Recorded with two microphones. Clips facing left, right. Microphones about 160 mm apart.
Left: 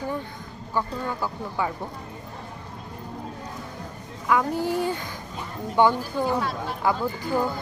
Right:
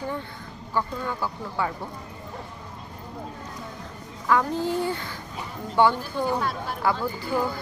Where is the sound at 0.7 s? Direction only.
15° left (ahead or behind).